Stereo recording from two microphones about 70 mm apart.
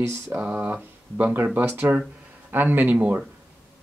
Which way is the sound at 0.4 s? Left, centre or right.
Right.